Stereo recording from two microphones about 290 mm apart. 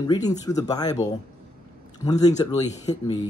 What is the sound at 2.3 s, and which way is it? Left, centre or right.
Speech, centre.